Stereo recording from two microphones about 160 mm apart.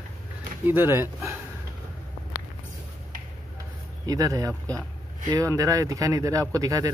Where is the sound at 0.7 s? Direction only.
15° right (ahead or behind).